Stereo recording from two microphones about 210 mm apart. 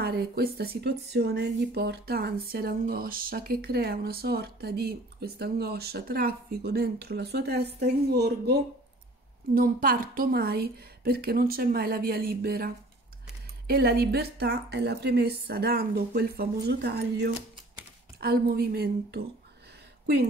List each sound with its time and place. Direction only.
0.0 s speech: 45° right (ahead or behind)